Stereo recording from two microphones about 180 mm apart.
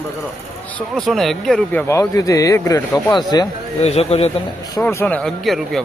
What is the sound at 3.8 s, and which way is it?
Speech, 35° left (ahead or behind).